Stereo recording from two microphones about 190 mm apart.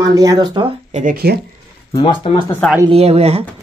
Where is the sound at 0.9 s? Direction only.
50° right (ahead or behind).